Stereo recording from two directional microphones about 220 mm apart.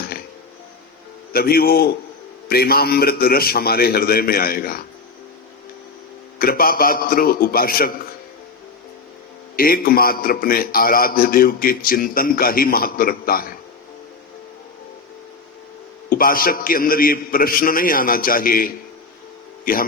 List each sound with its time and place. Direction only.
1.3 s a man's voice: 45° left (ahead or behind)
6.4 s a man's voice: 40° left (ahead or behind)
9.6 s a man's voice: 40° left (ahead or behind)
16.0 s a man's voice: 40° left (ahead or behind)